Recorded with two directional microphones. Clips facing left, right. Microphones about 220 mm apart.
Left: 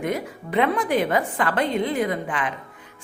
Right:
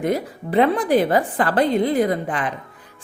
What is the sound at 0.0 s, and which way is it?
A woman's voice, 35° right (ahead or behind).